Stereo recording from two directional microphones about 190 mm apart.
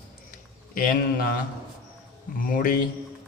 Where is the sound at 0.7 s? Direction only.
50° left (ahead or behind).